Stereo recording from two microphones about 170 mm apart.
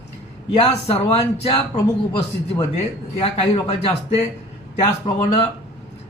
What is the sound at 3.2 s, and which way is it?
Speech, 35° left (ahead or behind).